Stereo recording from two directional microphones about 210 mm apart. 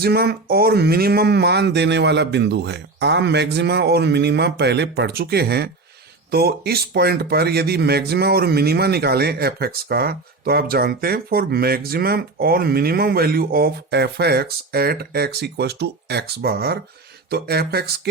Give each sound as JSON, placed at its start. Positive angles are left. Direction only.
{"t": 0.0, "sound": "speech", "side_deg": -50}